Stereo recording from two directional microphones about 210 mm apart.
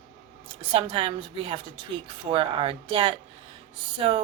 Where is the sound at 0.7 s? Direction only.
25° right (ahead or behind).